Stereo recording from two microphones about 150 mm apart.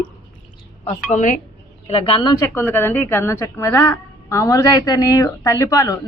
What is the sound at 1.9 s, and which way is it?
Speech, 35° left (ahead or behind).